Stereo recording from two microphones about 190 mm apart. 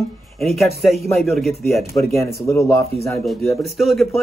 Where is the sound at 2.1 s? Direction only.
15° left (ahead or behind).